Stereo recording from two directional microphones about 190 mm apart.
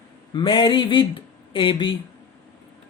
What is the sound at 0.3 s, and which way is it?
Speech, 25° left (ahead or behind).